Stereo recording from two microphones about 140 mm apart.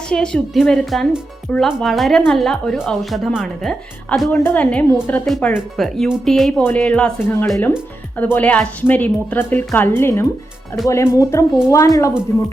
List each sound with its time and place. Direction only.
0.1 s speech: 5° left (ahead or behind)
6.6 s speech: 10° left (ahead or behind)